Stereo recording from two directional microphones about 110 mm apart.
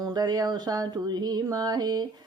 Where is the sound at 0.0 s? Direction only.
35° right (ahead or behind).